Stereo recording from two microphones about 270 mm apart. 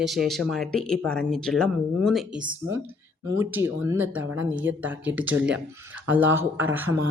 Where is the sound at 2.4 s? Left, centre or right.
Right.